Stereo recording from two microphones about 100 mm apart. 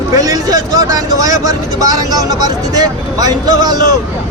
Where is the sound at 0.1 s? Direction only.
35° right (ahead or behind).